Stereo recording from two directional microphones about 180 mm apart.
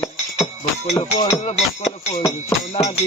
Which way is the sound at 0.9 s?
15° left (ahead or behind).